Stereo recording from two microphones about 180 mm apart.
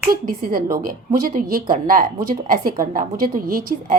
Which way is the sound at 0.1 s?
55° right (ahead or behind).